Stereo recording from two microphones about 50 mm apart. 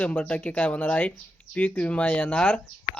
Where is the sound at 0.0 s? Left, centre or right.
Left.